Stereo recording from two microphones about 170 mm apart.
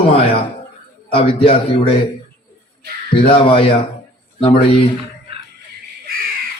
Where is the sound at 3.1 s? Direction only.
30° left (ahead or behind).